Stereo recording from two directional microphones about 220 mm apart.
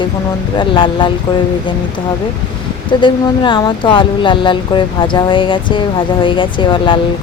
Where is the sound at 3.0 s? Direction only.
20° left (ahead or behind).